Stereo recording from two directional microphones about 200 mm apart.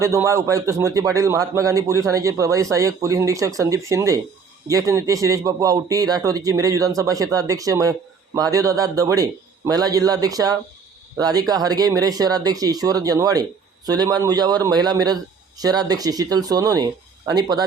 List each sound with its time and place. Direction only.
0.0 s a man's voice: 15° right (ahead or behind)